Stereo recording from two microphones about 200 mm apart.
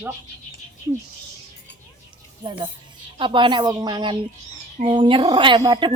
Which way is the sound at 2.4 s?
25° right (ahead or behind).